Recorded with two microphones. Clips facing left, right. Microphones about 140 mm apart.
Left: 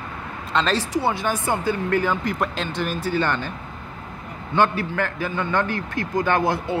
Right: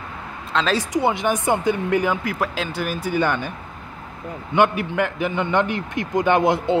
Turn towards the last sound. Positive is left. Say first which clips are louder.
# right 4 dB
turn(degrees=-20)  # may be behind; listen again after turning